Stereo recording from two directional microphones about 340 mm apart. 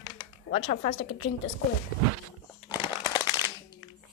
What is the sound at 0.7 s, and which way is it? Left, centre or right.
Speech, left.